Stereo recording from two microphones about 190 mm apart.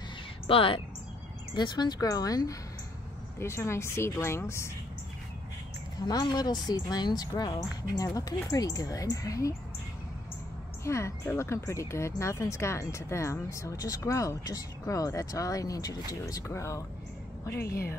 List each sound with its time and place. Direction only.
0.5 s speech: 30° left (ahead or behind)
6.0 s speech: 20° left (ahead or behind)
10.8 s speech: 15° left (ahead or behind)
17.6 s a woman's voice: 55° left (ahead or behind)